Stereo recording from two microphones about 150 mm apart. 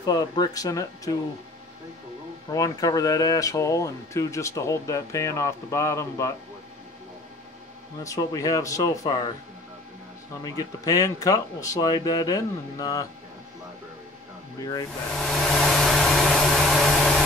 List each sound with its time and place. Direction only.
0.0 s speech: 25° left (ahead or behind)
2.5 s speech: 25° left (ahead or behind)
8.0 s speech: 20° left (ahead or behind)
10.4 s speech: 25° left (ahead or behind)
14.6 s speech: 25° left (ahead or behind)
15.1 s hair dryer: 5° left (ahead or behind)